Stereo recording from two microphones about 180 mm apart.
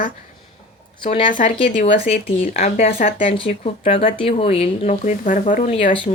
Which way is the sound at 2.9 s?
50° left (ahead or behind).